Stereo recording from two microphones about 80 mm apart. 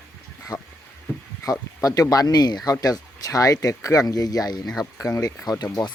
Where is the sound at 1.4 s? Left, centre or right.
Left.